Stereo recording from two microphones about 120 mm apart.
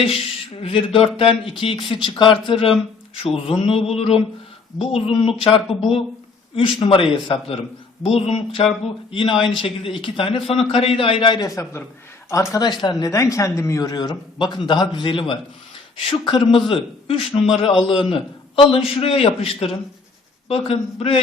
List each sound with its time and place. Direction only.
0.0 s a man's voice: 50° left (ahead or behind)
6.8 s a man's voice: 45° left (ahead or behind)
11.3 s a man's voice: 30° left (ahead or behind)
12.6 s a man's voice: 35° left (ahead or behind); by 21.2 s 55° left (ahead or behind)